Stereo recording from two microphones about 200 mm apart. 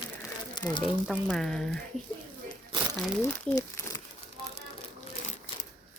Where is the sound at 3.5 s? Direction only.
15° left (ahead or behind).